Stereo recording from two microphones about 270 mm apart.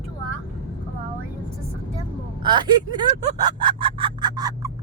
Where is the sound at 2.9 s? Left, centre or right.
Centre.